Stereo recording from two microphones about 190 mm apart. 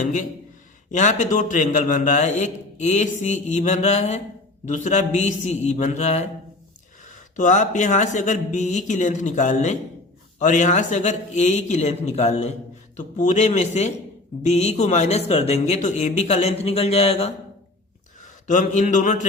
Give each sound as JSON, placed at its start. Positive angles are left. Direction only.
{"t": 0.9, "sound": "a man's voice", "side_deg": 40}
{"t": 7.3, "sound": "a man's voice", "side_deg": 40}
{"t": 18.4, "sound": "a man's voice", "side_deg": 40}